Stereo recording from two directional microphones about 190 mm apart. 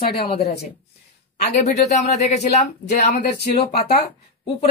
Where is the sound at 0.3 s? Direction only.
35° left (ahead or behind).